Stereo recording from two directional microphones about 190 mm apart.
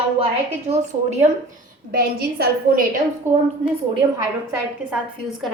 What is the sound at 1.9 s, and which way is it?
A woman's voice, 55° right (ahead or behind).